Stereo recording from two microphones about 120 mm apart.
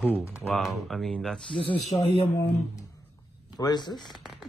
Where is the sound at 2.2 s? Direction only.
20° left (ahead or behind).